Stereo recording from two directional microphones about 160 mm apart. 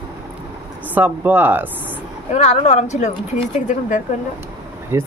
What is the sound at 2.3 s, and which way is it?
Speech, 45° left (ahead or behind).